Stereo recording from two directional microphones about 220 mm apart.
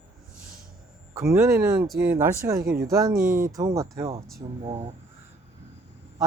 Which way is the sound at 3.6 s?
15° right (ahead or behind).